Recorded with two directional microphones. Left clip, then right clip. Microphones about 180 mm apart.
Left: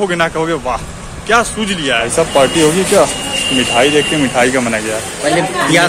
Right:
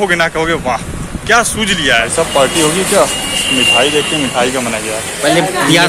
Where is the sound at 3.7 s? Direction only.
25° left (ahead or behind).